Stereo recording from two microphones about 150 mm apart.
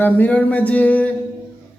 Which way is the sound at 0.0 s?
10° left (ahead or behind).